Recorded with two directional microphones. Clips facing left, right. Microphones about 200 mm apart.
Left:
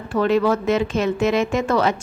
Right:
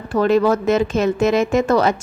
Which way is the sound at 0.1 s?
40° right (ahead or behind).